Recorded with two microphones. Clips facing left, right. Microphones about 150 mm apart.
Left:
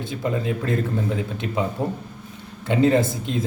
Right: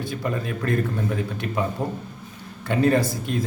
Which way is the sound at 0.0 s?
20° left (ahead or behind).